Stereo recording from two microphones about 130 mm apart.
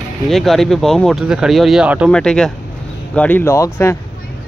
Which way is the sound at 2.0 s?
5° left (ahead or behind).